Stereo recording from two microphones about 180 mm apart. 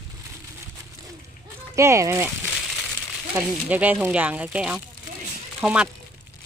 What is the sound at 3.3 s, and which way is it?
Speech, 10° right (ahead or behind).